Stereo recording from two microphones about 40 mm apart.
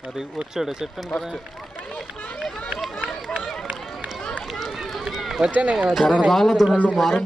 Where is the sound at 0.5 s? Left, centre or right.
Centre.